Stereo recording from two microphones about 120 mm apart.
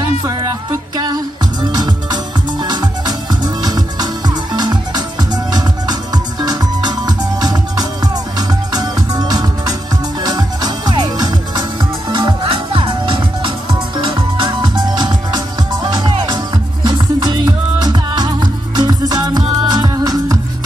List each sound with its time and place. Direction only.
0.3 s music: 30° right (ahead or behind)